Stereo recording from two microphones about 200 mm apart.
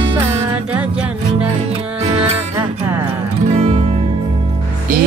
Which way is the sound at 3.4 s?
30° right (ahead or behind).